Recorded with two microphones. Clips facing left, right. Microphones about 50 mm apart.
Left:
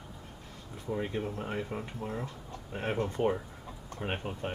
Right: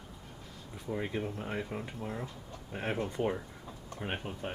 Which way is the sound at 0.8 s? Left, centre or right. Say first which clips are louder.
Left 1 dB; centre.